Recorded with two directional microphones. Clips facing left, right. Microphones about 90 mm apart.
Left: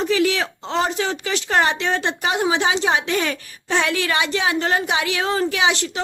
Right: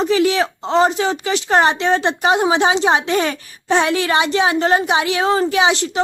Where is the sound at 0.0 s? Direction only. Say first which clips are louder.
Right 4 dB; 25° right (ahead or behind).